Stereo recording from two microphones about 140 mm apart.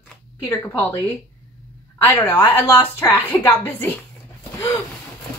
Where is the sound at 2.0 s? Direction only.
15° left (ahead or behind).